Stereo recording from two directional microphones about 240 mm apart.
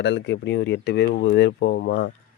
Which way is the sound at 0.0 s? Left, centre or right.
Left.